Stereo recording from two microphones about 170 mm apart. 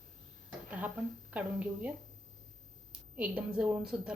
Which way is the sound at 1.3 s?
10° right (ahead or behind).